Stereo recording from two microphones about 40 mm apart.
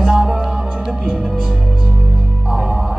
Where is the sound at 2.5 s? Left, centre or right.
Centre.